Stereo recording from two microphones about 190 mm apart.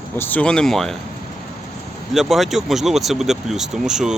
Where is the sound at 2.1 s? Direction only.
Centre (ahead or behind).